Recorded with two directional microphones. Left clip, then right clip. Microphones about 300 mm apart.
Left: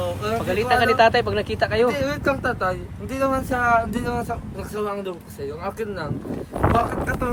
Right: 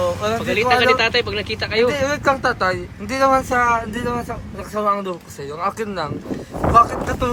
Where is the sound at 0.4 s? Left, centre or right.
Centre.